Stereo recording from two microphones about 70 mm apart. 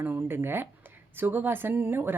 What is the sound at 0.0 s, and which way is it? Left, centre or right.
Speech, right.